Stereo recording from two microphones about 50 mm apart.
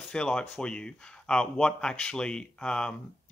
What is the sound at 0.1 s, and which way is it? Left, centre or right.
Speech, centre.